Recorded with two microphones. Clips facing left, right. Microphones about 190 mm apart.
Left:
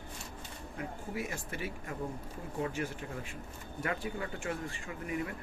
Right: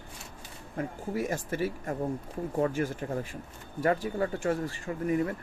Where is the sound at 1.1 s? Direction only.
40° right (ahead or behind).